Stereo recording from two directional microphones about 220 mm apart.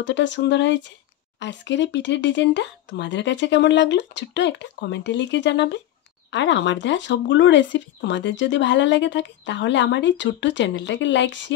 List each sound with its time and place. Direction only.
0.0 s speech: 55° left (ahead or behind)